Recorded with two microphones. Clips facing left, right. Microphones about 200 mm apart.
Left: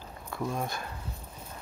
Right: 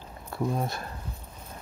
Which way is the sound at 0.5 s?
35° right (ahead or behind).